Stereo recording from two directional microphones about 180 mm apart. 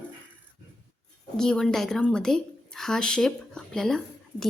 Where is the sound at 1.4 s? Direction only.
5° left (ahead or behind).